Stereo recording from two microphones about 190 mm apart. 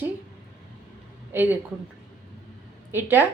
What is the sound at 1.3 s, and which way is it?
Speech, 10° right (ahead or behind).